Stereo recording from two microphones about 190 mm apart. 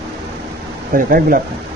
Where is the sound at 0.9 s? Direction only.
50° right (ahead or behind).